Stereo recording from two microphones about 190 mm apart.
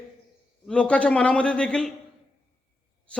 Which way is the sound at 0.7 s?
5° left (ahead or behind).